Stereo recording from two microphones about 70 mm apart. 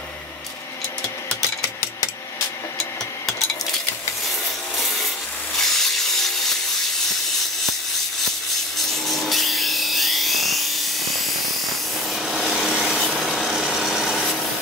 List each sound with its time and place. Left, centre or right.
5.6 s a sound: centre
8.7 s rub: centre
12.2 s wood: centre